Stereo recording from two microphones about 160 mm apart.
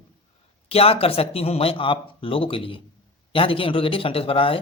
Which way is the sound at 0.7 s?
40° left (ahead or behind).